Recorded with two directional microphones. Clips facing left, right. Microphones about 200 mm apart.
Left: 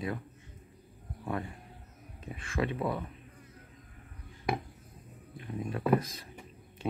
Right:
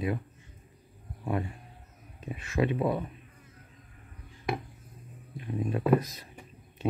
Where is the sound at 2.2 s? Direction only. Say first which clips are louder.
Right 4 dB; 15° right (ahead or behind).